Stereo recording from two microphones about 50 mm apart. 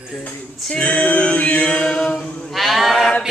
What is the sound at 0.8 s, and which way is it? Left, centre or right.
Mantra, left.